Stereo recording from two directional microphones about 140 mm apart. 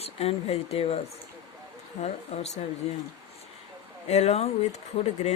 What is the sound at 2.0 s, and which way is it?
Speech, 50° left (ahead or behind).